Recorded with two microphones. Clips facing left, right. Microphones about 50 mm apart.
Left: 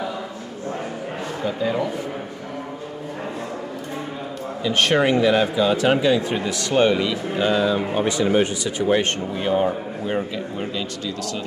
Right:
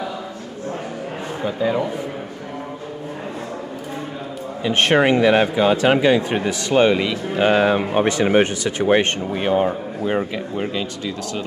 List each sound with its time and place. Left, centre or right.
1.4 s speech: centre
4.6 s speech: right